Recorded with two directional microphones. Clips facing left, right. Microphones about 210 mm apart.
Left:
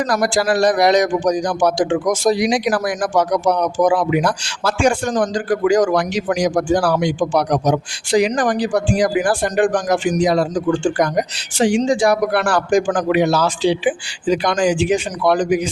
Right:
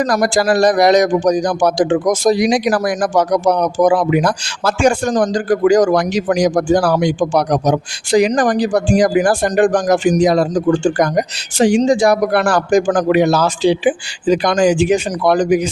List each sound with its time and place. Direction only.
0.0 s a man's voice: 40° right (ahead or behind)